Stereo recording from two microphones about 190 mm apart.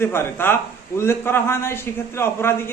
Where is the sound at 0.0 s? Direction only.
10° left (ahead or behind).